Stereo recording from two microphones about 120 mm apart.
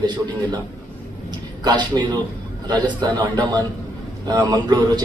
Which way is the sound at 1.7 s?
35° right (ahead or behind).